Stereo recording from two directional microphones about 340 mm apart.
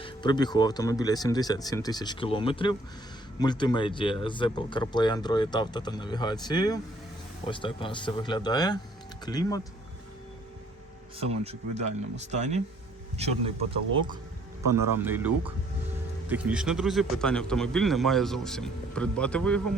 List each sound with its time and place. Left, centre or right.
0.0 s speech: centre
11.2 s speech: centre
14.6 s speech: right
15.0 s speech: centre